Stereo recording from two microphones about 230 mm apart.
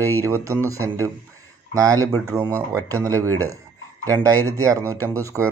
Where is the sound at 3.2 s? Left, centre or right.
Right.